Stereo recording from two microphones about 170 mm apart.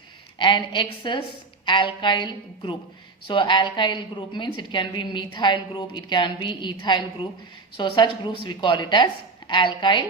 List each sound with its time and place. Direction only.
0.3 s a woman's voice: 30° left (ahead or behind)